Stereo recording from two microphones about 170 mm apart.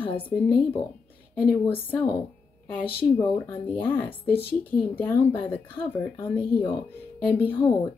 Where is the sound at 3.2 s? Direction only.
10° left (ahead or behind).